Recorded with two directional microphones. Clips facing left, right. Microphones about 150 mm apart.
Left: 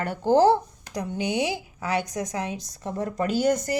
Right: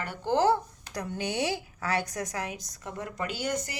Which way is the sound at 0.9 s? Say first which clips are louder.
Left 5 dB; 20° left (ahead or behind).